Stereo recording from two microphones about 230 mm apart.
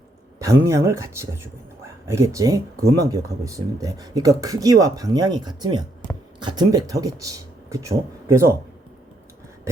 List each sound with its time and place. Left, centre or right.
0.3 s speech: centre